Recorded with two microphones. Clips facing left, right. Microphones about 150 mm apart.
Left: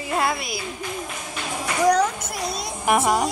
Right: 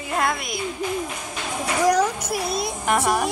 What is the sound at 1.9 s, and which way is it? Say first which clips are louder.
Speech: right 1 dB; 10° right (ahead or behind).